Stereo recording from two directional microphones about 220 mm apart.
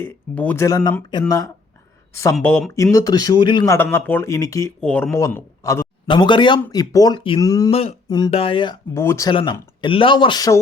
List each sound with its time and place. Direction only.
0.0 s a man's voice: 10° left (ahead or behind)